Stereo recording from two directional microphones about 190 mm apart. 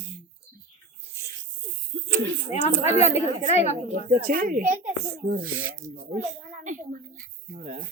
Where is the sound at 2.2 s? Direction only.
75° right (ahead or behind).